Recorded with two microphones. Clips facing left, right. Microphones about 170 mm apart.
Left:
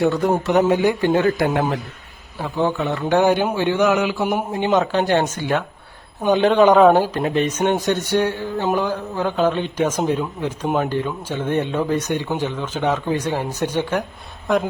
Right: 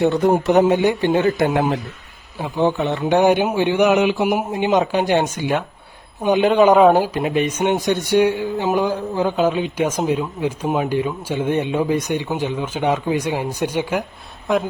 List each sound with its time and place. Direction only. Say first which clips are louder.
0.0 s a man's voice: right 2 dB; 20° right (ahead or behind)
14.5 s a woman's voice: even; centre (ahead or behind)